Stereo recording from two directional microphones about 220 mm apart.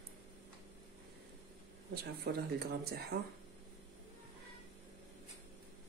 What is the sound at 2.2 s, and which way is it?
Speech, 45° right (ahead or behind).